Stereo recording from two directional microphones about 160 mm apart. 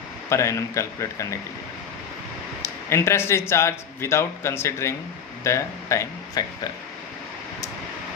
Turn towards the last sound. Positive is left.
turn(degrees=20)  # may be behind; listen again after turning